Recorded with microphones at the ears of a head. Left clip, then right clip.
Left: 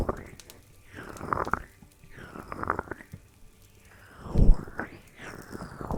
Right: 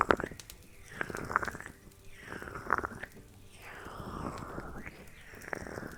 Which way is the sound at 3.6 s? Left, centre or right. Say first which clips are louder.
Right 11 dB; right.